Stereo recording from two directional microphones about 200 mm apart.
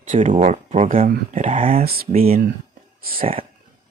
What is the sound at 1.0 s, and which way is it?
Speech, 40° right (ahead or behind).